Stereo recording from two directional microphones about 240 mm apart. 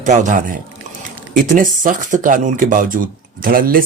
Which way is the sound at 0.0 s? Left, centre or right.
Right.